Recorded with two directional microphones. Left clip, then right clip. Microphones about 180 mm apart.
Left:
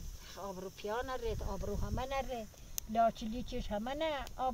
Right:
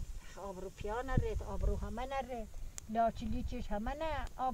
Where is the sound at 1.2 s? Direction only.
5° right (ahead or behind).